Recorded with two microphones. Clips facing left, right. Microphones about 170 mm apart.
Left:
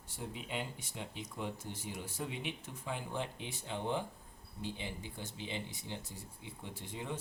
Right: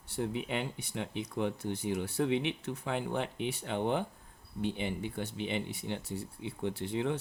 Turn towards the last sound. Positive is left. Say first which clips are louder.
# right 10 dB
turn(degrees=-75)  # may be behind; listen again after turning